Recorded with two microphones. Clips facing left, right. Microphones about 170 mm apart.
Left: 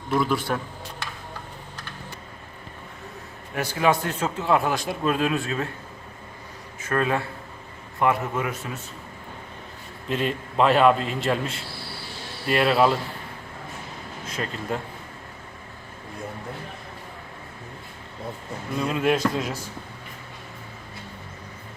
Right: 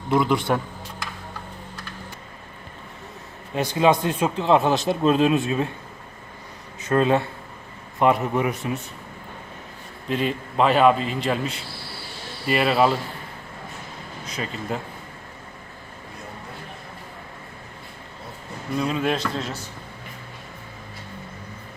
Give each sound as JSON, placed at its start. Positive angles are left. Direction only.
{"t": 0.1, "sound": "speech", "side_deg": -20}
{"t": 3.5, "sound": "speech", "side_deg": -20}
{"t": 6.8, "sound": "speech", "side_deg": -25}
{"t": 10.1, "sound": "a man's voice", "side_deg": 0}
{"t": 14.3, "sound": "a man's voice", "side_deg": 0}
{"t": 18.8, "sound": "a man's voice", "side_deg": 5}